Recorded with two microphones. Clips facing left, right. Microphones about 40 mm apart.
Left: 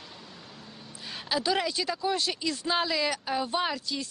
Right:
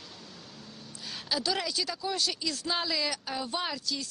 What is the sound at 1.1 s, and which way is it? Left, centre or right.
Speech, centre.